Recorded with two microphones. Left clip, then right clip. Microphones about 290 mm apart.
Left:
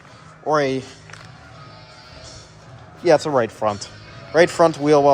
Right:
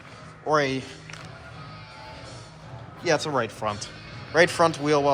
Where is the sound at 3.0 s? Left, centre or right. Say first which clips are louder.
Left 8 dB; left.